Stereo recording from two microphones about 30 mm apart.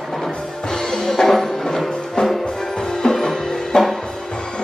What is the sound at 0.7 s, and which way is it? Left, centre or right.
Music, centre.